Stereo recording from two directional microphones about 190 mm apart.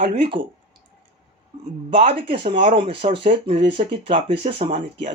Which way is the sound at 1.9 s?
30° right (ahead or behind).